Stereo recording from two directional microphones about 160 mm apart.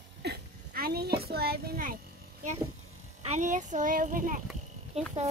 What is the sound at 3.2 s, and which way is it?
A child's voice, 50° right (ahead or behind).